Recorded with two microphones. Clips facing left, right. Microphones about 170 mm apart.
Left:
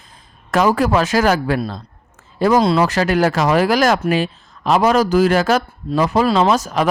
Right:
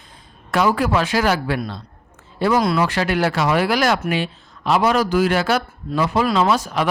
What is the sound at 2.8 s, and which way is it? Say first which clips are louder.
A man's voice: left 4 dB; 40° left (ahead or behind).